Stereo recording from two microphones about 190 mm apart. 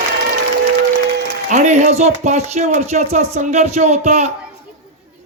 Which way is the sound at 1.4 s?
40° right (ahead or behind).